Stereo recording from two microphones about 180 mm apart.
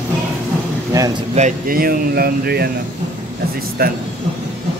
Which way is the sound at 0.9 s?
20° right (ahead or behind).